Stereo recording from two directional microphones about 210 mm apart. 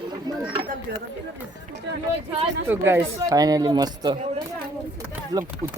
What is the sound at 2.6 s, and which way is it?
Speech, 10° right (ahead or behind).